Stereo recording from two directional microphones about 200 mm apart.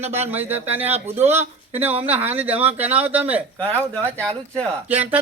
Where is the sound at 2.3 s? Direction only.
10° right (ahead or behind).